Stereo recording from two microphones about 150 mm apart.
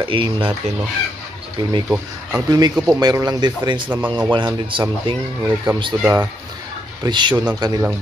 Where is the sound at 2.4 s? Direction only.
25° right (ahead or behind).